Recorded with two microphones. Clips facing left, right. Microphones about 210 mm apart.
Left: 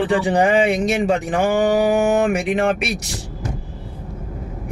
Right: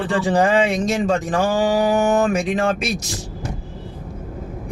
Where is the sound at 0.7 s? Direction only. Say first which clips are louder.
Left 1 dB; 65° left (ahead or behind).